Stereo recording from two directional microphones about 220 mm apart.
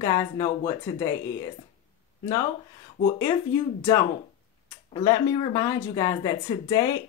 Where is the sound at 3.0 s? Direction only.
15° left (ahead or behind).